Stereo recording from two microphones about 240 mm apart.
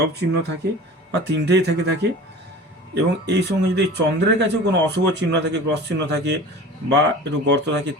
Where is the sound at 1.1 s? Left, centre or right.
Right.